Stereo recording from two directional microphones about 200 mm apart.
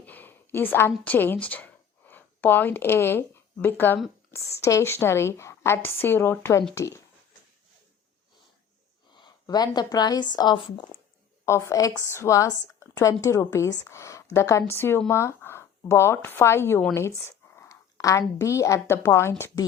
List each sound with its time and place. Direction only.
0.0 s a sound: 10° left (ahead or behind)
0.9 s a woman's voice: 10° left (ahead or behind)
9.1 s a woman's voice: 20° left (ahead or behind)